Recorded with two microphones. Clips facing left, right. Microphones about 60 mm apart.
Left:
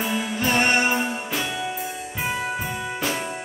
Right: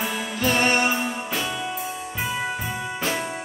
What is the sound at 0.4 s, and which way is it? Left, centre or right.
Music, left.